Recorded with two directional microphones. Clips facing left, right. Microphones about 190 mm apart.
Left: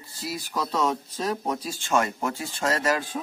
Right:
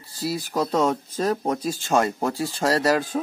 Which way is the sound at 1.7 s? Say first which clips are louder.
Right 3 dB; 35° right (ahead or behind).